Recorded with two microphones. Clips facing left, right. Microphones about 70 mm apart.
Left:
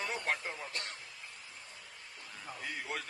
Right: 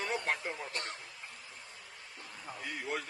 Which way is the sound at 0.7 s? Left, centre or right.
Right.